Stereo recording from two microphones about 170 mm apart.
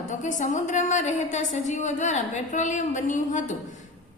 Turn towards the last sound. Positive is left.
turn(degrees=45)  # may be behind; listen again after turning